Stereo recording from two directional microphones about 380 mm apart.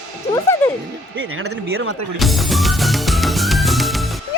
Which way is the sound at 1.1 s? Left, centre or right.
Right.